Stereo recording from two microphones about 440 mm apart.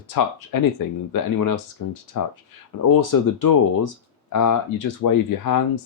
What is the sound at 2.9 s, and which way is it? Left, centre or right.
Speech, left.